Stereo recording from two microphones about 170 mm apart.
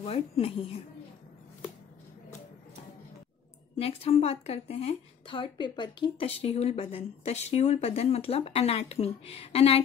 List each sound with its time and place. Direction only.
0.0 s a woman's voice: 35° left (ahead or behind)
3.7 s a woman's voice: 35° left (ahead or behind)